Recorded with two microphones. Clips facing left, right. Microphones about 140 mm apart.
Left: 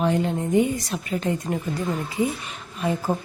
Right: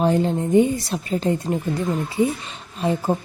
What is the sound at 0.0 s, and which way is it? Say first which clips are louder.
A woman's voice: right 3 dB; 30° right (ahead or behind).